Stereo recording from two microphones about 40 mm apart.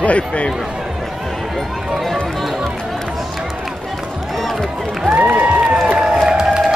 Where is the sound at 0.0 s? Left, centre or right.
Left.